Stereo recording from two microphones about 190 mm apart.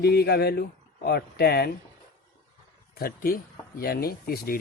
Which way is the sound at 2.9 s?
50° left (ahead or behind).